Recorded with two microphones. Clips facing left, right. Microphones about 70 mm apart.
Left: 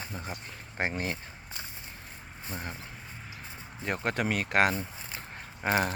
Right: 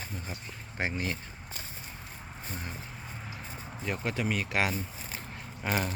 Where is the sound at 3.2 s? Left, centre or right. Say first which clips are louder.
Right 2 dB; right.